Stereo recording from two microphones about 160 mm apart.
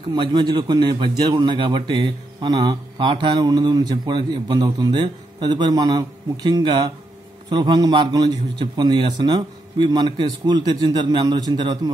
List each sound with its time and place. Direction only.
0.1 s a man's voice: 25° right (ahead or behind)